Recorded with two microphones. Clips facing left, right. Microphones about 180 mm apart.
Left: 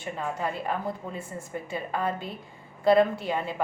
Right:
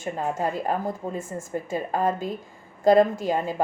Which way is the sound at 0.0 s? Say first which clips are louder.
Right 4 dB; 45° right (ahead or behind).